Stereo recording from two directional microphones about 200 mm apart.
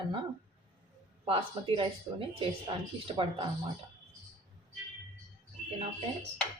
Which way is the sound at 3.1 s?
25° right (ahead or behind).